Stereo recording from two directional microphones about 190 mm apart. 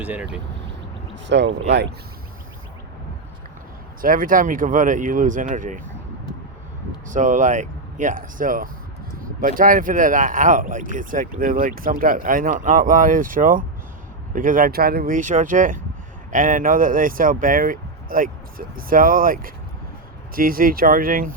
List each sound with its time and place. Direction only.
0.0 s speech: 10° right (ahead or behind)
1.3 s speech: 65° right (ahead or behind)
4.0 s speech: 45° right (ahead or behind)
7.1 s speech: 40° right (ahead or behind)